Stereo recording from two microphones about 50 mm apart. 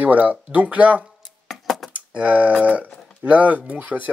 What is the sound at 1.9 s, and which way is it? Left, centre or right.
Typing, right.